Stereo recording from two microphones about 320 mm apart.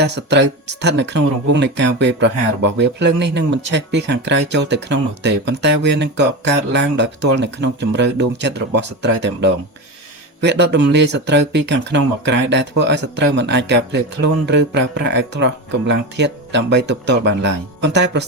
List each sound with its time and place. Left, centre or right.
0.0 s speech: right